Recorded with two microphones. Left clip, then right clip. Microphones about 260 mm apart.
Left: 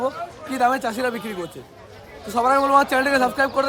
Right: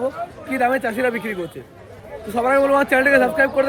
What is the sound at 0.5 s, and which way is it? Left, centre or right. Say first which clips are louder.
A man's voice: right 1 dB; centre.